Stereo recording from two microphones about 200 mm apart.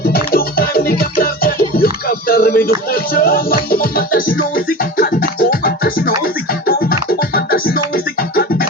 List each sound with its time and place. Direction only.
0.0 s music: 50° left (ahead or behind)